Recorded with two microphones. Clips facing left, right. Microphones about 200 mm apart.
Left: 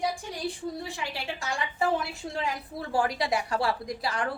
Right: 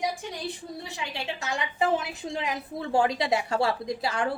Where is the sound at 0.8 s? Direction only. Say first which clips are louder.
Even; 20° right (ahead or behind).